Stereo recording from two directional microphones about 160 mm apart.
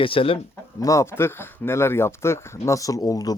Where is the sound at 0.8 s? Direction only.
20° left (ahead or behind).